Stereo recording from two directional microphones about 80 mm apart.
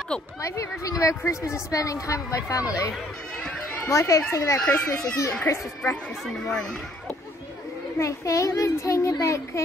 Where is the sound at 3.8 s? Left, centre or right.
Left.